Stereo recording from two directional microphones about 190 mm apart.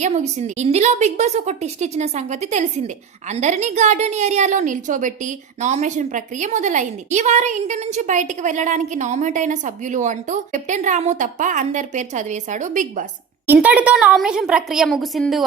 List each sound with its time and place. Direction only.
0.0 s a woman's voice: 40° right (ahead or behind)
13.5 s a woman's voice: 10° right (ahead or behind)